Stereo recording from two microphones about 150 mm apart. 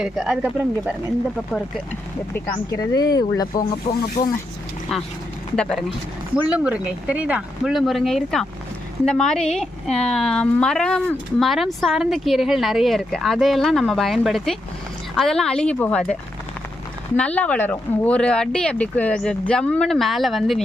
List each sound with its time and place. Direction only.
0.0 s speech: 5° right (ahead or behind)
2.3 s speech: 25° left (ahead or behind)
3.9 s speech: 45° left (ahead or behind)
5.5 s speech: centre (ahead or behind)
6.3 s speech: 10° right (ahead or behind); by 16.1 s 5° left (ahead or behind)
17.2 s speech: 10° left (ahead or behind)